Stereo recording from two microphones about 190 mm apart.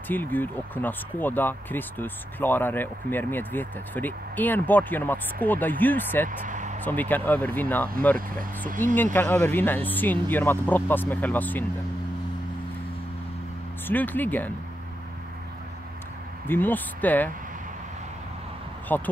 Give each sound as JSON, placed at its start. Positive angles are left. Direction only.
{"t": 0.1, "sound": "speech", "side_deg": 10}
{"t": 6.2, "sound": "vehicle", "side_deg": -40}
{"t": 6.8, "sound": "speech", "side_deg": 10}
{"t": 13.8, "sound": "speech", "side_deg": 10}
{"t": 16.4, "sound": "speech", "side_deg": 10}
{"t": 18.9, "sound": "speech", "side_deg": 10}